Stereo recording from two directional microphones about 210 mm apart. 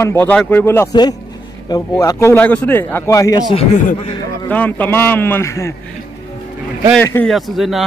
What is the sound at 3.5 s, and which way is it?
Speech, 30° left (ahead or behind).